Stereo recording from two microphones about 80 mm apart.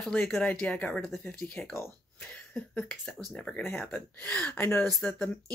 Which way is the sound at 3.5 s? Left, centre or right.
Left.